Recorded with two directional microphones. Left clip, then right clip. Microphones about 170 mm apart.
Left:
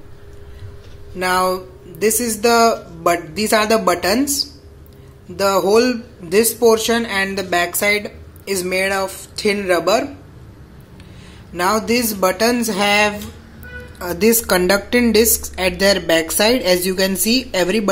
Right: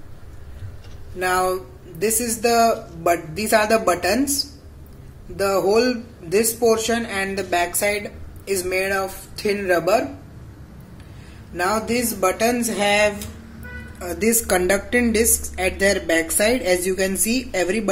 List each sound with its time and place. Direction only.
1.2 s speech: 25° left (ahead or behind)
11.5 s speech: 25° left (ahead or behind)